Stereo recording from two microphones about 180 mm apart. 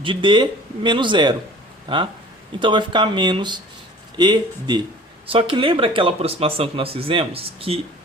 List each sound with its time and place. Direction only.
0.0 s speech: 25° right (ahead or behind)